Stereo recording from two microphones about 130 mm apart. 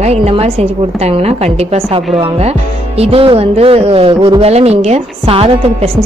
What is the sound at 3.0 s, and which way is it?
A woman's voice, 45° right (ahead or behind).